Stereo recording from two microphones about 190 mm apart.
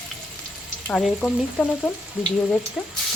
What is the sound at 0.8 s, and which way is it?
Frying, centre (ahead or behind).